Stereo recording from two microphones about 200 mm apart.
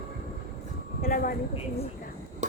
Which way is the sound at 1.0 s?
45° left (ahead or behind).